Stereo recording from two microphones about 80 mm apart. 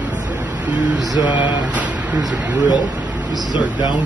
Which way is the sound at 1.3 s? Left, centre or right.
Right.